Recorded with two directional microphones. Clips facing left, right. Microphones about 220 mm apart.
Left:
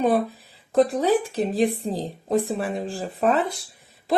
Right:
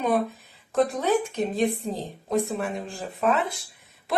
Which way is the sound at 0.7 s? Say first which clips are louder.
Left 3 dB; 30° left (ahead or behind).